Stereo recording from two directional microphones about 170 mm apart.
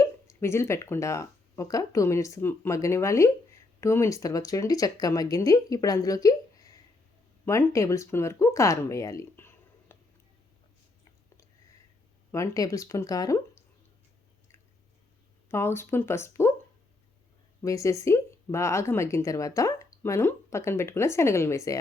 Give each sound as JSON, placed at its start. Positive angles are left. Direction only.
{"t": 0.0, "sound": "speech", "side_deg": 15}
{"t": 12.3, "sound": "speech", "side_deg": 20}
{"t": 15.4, "sound": "speech", "side_deg": 15}
{"t": 17.6, "sound": "speech", "side_deg": 20}